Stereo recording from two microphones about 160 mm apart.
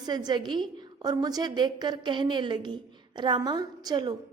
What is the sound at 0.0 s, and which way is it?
A woman's voice, 25° right (ahead or behind).